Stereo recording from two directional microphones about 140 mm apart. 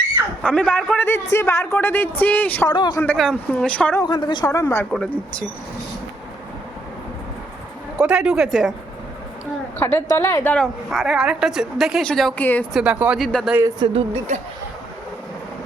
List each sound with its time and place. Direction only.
0.4 s speech: 10° left (ahead or behind)
2.6 s a woman's voice: 30° left (ahead or behind)
3.2 s speech: 5° left (ahead or behind)
4.0 s speech: 35° left (ahead or behind)
4.6 s speech: 15° left (ahead or behind)
7.9 s speech: 10° right (ahead or behind)
9.8 s a woman's voice: 20° left (ahead or behind)
10.5 s speech: centre (ahead or behind)
12.7 s speech: 10° right (ahead or behind)
13.5 s speech: 20° right (ahead or behind)
13.7 s speech: 35° right (ahead or behind)